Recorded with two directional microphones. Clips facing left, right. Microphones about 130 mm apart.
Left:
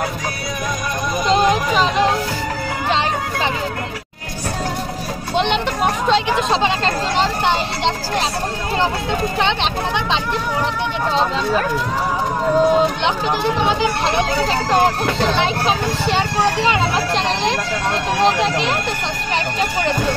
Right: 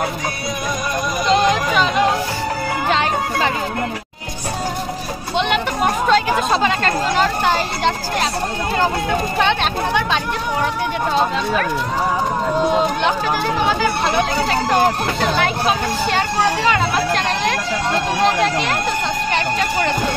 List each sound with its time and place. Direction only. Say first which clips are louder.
1.4 s a sound: left 1 dB; 5° left (ahead or behind)
6.6 s speech: right 1 dB; 25° left (ahead or behind)
9.4 s speech: right 1 dB; 20° left (ahead or behind)
13.6 s speech: even; 25° left (ahead or behind)
18.2 s speech: left 1 dB; 25° left (ahead or behind)